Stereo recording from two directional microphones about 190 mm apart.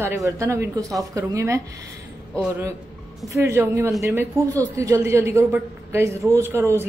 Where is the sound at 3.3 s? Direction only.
15° right (ahead or behind).